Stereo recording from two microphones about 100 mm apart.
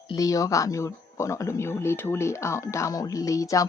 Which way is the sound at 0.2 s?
35° left (ahead or behind).